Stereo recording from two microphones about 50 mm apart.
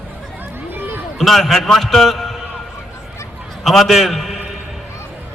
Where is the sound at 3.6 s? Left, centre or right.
Centre.